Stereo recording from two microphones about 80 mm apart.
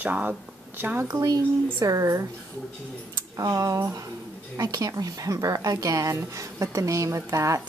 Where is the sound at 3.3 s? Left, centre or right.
Right.